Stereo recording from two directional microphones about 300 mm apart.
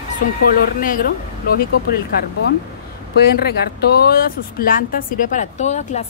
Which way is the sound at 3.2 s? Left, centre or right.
Left.